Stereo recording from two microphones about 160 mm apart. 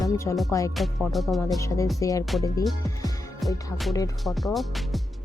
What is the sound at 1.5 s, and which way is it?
Speech, 20° left (ahead or behind).